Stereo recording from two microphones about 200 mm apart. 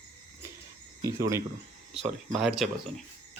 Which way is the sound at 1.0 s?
15° right (ahead or behind).